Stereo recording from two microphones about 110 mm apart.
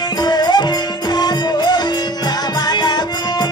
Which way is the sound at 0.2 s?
40° left (ahead or behind).